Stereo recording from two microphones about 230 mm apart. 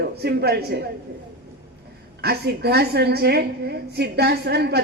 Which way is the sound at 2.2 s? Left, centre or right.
Right.